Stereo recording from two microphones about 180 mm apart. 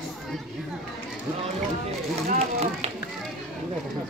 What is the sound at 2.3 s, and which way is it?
Run, 35° right (ahead or behind).